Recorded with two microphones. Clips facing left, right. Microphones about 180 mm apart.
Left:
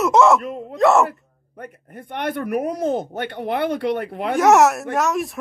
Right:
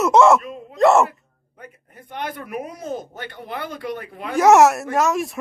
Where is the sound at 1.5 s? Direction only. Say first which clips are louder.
Left 7 dB; 65° left (ahead or behind).